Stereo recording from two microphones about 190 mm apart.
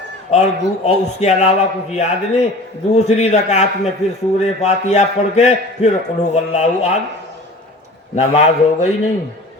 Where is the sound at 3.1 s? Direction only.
35° left (ahead or behind).